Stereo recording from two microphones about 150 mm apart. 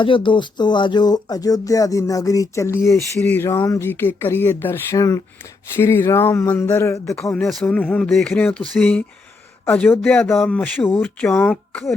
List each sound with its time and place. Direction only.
0.0 s music: 35° left (ahead or behind)
3.2 s speech: 10° left (ahead or behind)
7.6 s speech: 10° left (ahead or behind)